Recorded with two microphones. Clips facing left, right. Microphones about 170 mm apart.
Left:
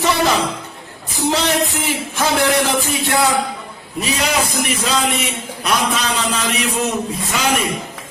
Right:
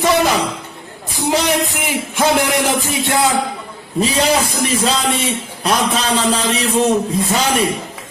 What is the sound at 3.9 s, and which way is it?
A man's voice, 30° right (ahead or behind).